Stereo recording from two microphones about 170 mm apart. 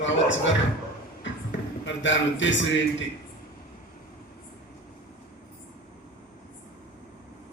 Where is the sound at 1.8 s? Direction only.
90° left.